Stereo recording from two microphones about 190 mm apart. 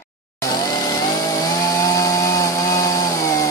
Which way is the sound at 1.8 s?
20° left (ahead or behind).